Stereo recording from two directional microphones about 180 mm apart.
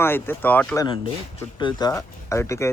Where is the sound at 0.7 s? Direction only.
25° left (ahead or behind).